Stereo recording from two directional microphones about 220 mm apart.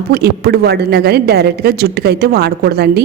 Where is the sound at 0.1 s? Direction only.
45° right (ahead or behind).